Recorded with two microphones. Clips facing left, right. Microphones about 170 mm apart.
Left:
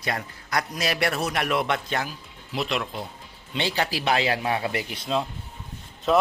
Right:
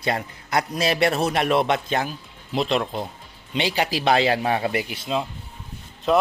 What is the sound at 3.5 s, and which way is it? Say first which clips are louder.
Speech: right 3 dB; 15° right (ahead or behind).